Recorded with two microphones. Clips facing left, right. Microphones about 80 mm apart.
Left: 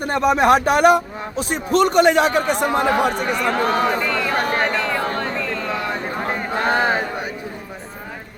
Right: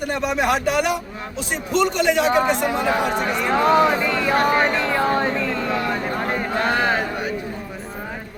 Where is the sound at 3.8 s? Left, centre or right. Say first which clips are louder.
Right 1 dB; centre.